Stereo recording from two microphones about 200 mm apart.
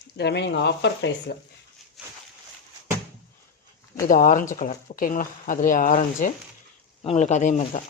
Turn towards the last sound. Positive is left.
turn(degrees=40)  # may be behind; listen again after turning